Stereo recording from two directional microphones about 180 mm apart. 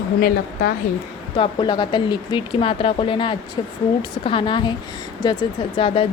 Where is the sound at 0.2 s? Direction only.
50° left (ahead or behind).